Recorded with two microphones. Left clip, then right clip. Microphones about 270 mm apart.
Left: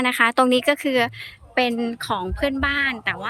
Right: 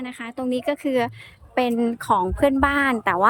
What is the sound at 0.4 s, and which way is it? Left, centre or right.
A woman's voice, centre.